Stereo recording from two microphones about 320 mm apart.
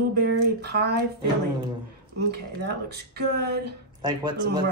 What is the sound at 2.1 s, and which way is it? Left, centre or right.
Speech, right.